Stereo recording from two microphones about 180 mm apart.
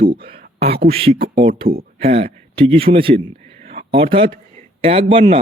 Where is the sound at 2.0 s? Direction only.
35° right (ahead or behind).